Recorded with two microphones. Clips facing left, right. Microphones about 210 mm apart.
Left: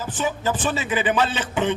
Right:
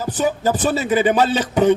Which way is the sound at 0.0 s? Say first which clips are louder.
Right 5 dB; 40° right (ahead or behind).